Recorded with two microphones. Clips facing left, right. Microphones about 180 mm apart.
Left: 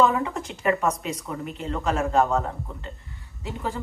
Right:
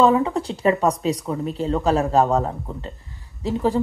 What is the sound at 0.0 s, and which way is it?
Speech, 30° right (ahead or behind).